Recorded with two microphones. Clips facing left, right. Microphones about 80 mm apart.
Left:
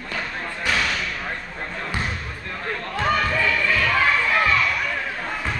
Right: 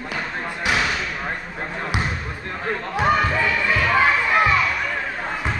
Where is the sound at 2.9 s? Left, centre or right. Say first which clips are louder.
Right 2 dB; centre.